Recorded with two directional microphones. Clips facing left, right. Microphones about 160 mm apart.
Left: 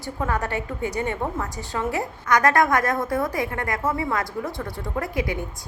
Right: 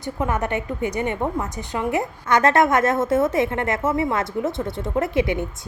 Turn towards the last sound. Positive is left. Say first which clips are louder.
# right 5 dB
turn(degrees=-25)  # may be behind; listen again after turning